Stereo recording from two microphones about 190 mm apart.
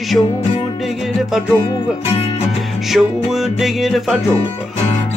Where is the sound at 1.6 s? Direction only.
30° left (ahead or behind).